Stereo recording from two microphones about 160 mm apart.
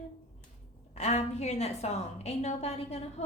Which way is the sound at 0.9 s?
40° left (ahead or behind).